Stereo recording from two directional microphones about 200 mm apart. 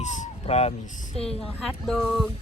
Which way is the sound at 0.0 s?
35° left (ahead or behind).